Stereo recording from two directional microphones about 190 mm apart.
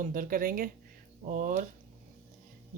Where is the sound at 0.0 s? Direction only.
45° right (ahead or behind).